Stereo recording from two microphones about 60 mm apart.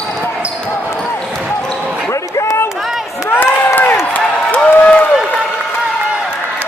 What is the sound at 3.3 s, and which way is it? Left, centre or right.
Crowd, left.